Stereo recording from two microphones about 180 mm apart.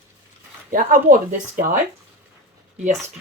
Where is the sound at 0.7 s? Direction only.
50° right (ahead or behind).